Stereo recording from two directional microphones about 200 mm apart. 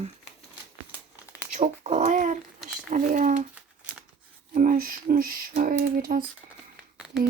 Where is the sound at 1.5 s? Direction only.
35° right (ahead or behind).